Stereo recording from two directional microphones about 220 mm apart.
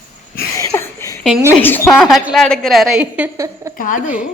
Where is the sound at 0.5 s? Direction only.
15° left (ahead or behind).